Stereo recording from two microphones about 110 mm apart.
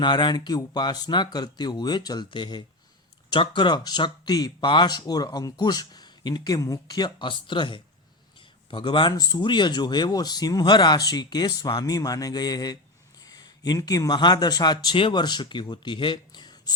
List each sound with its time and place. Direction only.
0.0 s speech: 45° left (ahead or behind)